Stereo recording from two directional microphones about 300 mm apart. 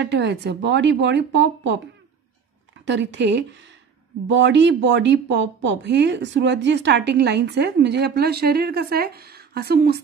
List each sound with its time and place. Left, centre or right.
0.0 s speech: right
2.8 s speech: right